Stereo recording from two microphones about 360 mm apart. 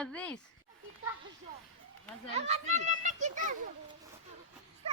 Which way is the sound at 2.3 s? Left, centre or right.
Centre.